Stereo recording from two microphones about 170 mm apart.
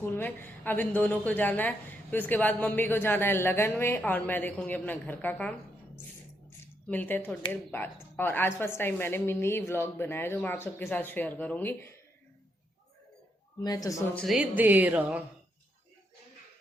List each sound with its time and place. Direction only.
0.0 s a woman's voice: 10° left (ahead or behind)
6.8 s a woman's voice: 10° left (ahead or behind)
13.6 s speech: 20° left (ahead or behind)
14.2 s speech: 5° right (ahead or behind)